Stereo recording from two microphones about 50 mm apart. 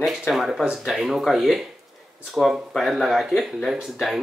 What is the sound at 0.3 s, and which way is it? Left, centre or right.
Speech, centre.